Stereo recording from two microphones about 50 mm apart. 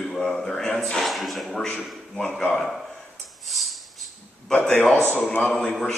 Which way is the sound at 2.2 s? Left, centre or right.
Centre.